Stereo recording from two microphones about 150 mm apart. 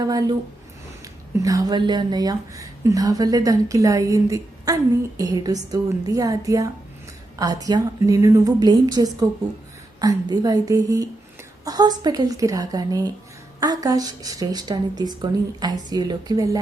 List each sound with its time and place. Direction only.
1.0 s speech: 25° right (ahead or behind)